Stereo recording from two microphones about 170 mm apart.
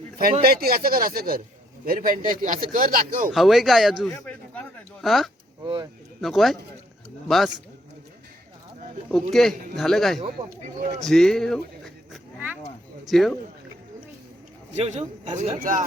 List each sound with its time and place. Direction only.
0.4 s a man's voice: 60° right (ahead or behind)
3.3 s a man's voice: centre (ahead or behind)
4.1 s a sound: 10° left (ahead or behind)
5.0 s a man's voice: centre (ahead or behind)
5.6 s speech: 25° right (ahead or behind)
6.2 s a man's voice: centre (ahead or behind)
9.0 s a man's voice: 5° left (ahead or behind)
13.1 s a man's voice: centre (ahead or behind)
14.8 s a man's voice: 45° right (ahead or behind)